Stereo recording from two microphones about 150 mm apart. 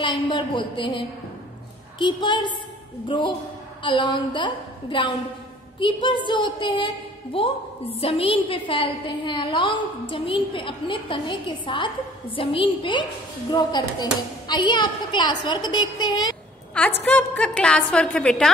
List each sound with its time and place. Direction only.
0.0 s a woman's voice: 35° left (ahead or behind)
16.7 s a woman's voice: 10° left (ahead or behind)